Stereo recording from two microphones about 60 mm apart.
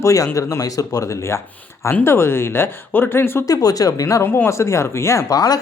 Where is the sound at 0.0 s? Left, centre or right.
Left.